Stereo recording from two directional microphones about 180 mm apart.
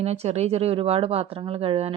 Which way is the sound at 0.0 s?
35° right (ahead or behind).